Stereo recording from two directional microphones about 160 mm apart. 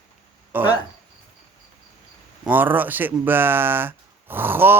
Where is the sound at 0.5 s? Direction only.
10° right (ahead or behind).